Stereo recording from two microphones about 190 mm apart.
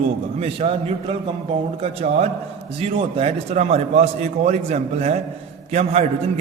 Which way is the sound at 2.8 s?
30° right (ahead or behind).